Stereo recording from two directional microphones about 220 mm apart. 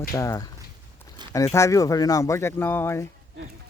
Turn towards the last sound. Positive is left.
turn(degrees=10)  # may be behind; listen again after turning